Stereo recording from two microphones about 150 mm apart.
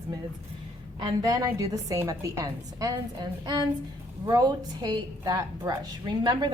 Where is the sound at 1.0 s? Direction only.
25° right (ahead or behind).